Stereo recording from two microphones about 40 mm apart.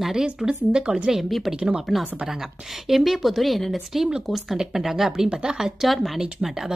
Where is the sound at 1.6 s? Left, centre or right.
Right.